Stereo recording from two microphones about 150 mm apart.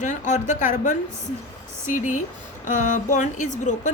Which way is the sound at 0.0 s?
55° left (ahead or behind).